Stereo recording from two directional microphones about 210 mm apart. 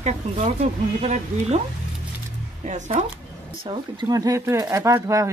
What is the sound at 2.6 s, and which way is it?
Speech, 30° right (ahead or behind).